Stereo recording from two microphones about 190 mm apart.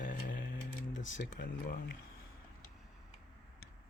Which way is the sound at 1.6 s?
50° left (ahead or behind).